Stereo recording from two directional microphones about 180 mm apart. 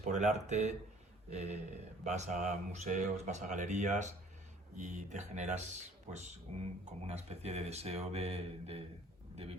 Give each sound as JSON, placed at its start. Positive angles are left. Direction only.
{"t": 0.0, "sound": "speech", "side_deg": -40}